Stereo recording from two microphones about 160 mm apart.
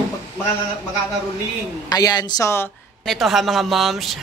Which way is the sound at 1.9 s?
25° left (ahead or behind).